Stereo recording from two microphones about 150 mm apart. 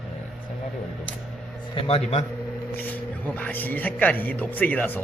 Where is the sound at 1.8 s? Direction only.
40° left (ahead or behind).